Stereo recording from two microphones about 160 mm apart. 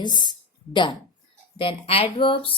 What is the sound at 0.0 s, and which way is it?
Speech, 25° left (ahead or behind).